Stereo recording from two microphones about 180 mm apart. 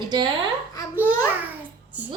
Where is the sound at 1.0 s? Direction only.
10° right (ahead or behind).